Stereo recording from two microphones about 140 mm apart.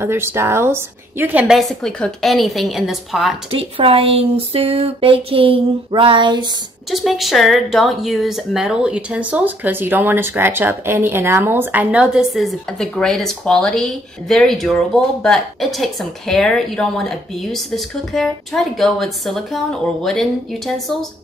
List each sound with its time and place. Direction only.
0.0 s speech: 15° right (ahead or behind); by 3.3 s centre (ahead or behind)
3.5 s speech: 40° right (ahead or behind)
6.9 s speech: centre (ahead or behind)